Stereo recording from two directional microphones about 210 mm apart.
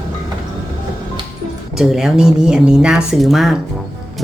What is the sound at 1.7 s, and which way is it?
Speech, centre (ahead or behind).